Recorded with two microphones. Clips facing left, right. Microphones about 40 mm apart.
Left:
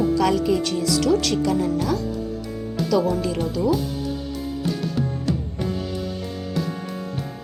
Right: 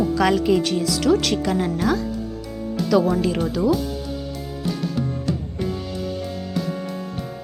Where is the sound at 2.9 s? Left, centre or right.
Right.